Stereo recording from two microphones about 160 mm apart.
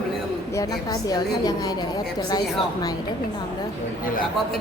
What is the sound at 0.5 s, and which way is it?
A woman's voice, 20° left (ahead or behind).